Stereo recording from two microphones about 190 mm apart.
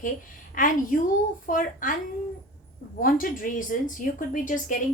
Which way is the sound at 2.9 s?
50° left (ahead or behind).